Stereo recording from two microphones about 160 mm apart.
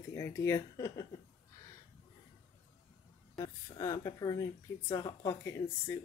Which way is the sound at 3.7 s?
20° left (ahead or behind).